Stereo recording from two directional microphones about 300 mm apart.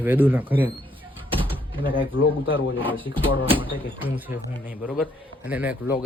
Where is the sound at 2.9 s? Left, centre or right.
Centre.